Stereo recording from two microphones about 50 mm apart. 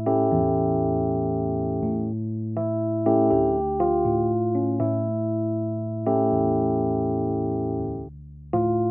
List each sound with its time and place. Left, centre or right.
0.0 s music: centre
2.6 s electric piano: left
6.0 s music: centre
8.5 s music: centre